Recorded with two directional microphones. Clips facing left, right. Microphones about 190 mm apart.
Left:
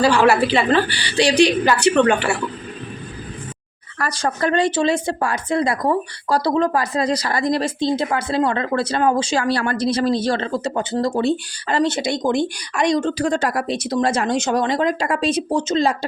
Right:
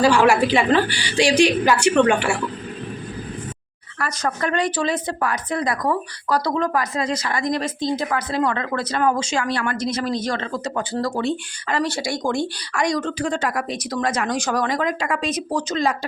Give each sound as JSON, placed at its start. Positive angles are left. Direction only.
{"t": 0.0, "sound": "a woman's voice", "side_deg": -10}
{"t": 3.9, "sound": "a woman's voice", "side_deg": 35}